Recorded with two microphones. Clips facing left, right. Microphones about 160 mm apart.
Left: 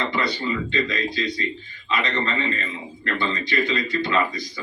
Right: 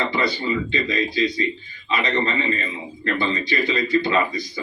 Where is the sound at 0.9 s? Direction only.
30° right (ahead or behind).